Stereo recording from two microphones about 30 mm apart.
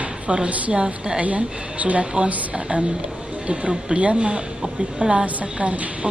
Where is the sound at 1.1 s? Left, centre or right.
Right.